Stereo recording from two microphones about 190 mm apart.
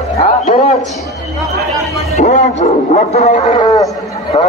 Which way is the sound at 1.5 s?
35° left (ahead or behind).